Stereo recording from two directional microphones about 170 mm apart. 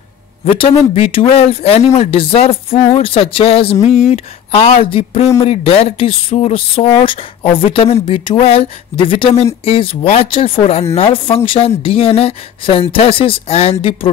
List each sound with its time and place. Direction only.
0.6 s speech: 35° left (ahead or behind)